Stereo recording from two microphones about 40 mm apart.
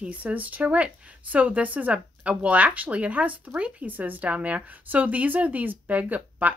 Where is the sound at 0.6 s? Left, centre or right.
Right.